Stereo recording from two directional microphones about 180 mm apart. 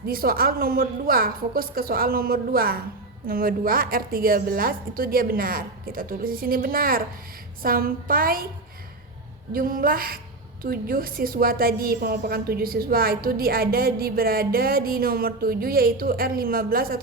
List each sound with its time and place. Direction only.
0.0 s a woman's voice: 55° right (ahead or behind)
9.5 s a woman's voice: 50° right (ahead or behind)